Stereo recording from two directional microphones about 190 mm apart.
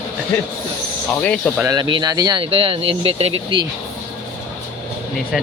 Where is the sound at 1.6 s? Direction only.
20° right (ahead or behind).